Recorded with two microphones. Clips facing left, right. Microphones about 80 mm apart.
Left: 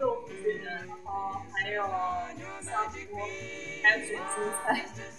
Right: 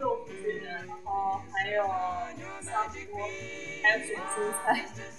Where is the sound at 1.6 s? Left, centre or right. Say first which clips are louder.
Right 1 dB; centre.